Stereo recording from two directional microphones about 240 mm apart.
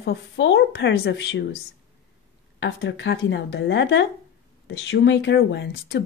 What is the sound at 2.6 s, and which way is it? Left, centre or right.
A woman's voice, left.